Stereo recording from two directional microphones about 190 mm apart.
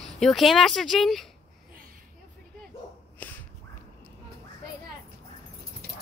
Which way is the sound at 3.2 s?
5° left (ahead or behind).